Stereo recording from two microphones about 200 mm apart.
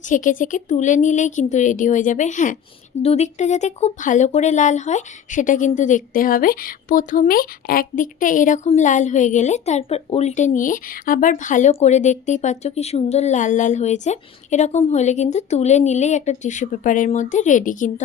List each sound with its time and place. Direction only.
0.1 s speech: 40° left (ahead or behind)